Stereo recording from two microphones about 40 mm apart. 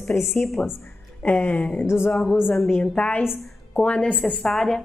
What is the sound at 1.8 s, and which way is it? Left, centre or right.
Speech, left.